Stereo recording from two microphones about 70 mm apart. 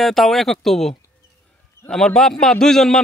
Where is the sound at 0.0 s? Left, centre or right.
Centre.